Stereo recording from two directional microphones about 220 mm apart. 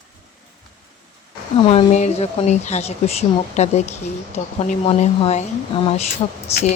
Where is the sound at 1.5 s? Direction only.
25° left (ahead or behind).